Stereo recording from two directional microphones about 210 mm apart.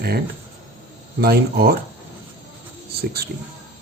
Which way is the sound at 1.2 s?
45° right (ahead or behind).